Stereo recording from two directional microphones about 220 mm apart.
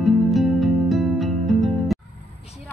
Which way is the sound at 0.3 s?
Centre (ahead or behind).